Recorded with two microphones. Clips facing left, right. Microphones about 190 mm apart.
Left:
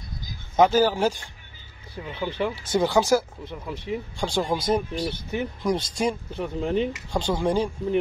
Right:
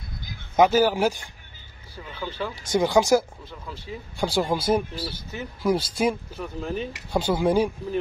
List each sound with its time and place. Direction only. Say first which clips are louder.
0.6 s speech: even; 10° right (ahead or behind)
2.0 s speech: left 4 dB; 20° left (ahead or behind)
2.6 s speech: right 2 dB; 15° right (ahead or behind)
3.4 s speech: left 6 dB; 20° left (ahead or behind)
4.2 s speech: right 3 dB; 5° right (ahead or behind)
5.0 s speech: left 6 dB; 25° left (ahead or behind)
5.6 s speech: right 4 dB; 5° right (ahead or behind)
6.3 s speech: left 5 dB; 25° left (ahead or behind)
7.1 s speech: right 2 dB; 10° right (ahead or behind)